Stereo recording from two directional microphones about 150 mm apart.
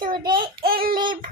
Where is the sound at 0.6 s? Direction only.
80° right.